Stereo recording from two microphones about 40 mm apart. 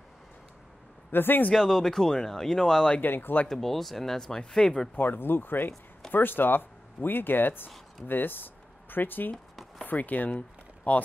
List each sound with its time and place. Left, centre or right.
1.1 s speech: left
1.5 s speech: centre
3.0 s speech: left
3.4 s speech: centre
4.9 s speech: left
9.8 s speech: left